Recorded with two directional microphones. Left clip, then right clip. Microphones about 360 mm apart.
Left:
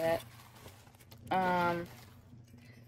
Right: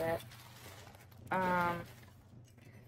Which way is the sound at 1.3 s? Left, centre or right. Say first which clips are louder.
Left 2 dB; centre.